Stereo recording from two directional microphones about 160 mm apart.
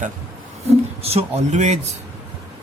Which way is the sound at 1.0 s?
40° right (ahead or behind).